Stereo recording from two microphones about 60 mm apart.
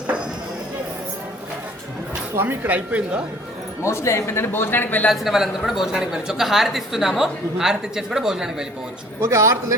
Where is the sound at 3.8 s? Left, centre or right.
Left.